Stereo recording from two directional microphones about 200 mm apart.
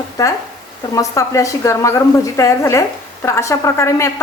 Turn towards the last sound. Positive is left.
turn(degrees=15)  # may be behind; listen again after turning